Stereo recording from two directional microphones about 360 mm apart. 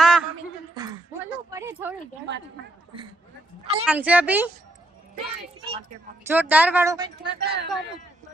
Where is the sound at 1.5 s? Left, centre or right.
Centre.